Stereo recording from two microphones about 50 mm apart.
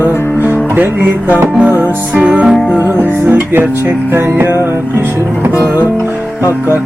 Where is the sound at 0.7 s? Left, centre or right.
Right.